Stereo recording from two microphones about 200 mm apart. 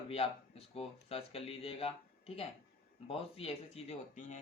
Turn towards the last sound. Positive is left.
turn(degrees=35)  # may be behind; listen again after turning